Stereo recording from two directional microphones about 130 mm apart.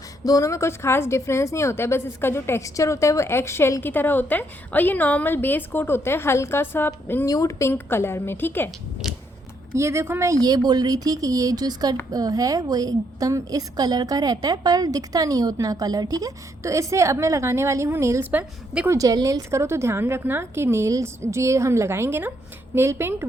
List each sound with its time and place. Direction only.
0.3 s a woman's voice: 25° left (ahead or behind)
9.7 s a woman's voice: 20° right (ahead or behind)
18.9 s a woman's voice: 25° right (ahead or behind)